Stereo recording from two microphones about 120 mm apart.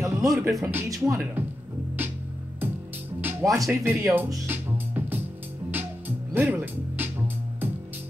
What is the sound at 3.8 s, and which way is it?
Speech, 20° right (ahead or behind).